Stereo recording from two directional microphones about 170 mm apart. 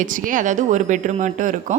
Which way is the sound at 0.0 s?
50° right (ahead or behind).